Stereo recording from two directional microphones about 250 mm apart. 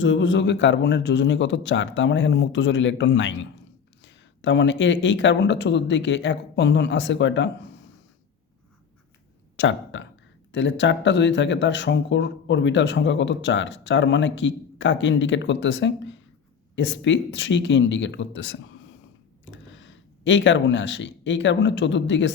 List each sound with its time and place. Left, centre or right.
0.0 s speech: left
9.6 s speech: left